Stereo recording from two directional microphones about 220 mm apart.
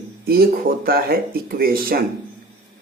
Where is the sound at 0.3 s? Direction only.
45° right (ahead or behind).